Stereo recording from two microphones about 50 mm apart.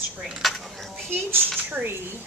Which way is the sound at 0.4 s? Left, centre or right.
Centre.